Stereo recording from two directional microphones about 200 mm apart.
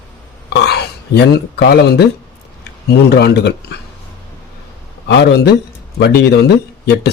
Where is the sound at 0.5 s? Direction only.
55° left (ahead or behind).